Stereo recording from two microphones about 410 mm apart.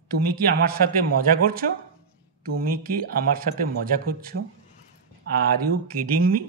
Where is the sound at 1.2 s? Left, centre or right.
Right.